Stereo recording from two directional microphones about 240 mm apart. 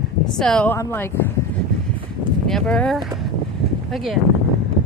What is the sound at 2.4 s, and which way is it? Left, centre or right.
A woman's voice, centre.